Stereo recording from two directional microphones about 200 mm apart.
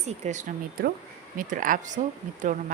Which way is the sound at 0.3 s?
40° right (ahead or behind).